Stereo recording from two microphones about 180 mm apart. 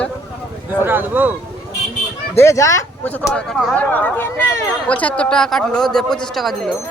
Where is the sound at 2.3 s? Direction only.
15° left (ahead or behind).